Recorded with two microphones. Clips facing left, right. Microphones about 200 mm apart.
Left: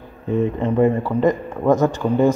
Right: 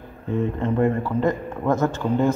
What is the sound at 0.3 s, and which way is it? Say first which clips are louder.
A man's voice: left 4 dB; 15° left (ahead or behind).